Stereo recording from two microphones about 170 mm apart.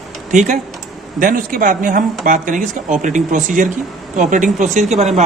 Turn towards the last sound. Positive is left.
turn(degrees=-40)  # may be behind; listen again after turning